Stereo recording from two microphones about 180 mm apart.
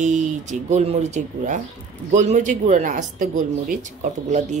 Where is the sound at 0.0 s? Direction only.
40° right (ahead or behind).